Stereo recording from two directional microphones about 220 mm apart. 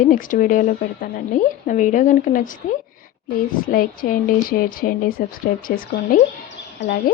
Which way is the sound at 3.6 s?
40° left (ahead or behind).